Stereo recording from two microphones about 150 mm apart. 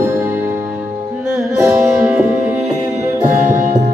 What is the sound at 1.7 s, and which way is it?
Music, 10° right (ahead or behind).